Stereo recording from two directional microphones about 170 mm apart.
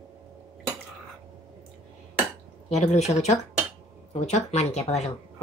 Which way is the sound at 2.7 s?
40° left (ahead or behind).